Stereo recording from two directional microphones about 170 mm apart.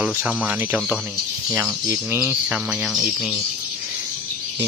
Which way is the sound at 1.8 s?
20° right (ahead or behind).